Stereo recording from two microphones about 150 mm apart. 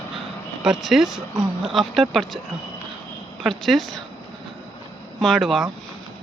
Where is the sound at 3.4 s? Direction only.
Centre (ahead or behind).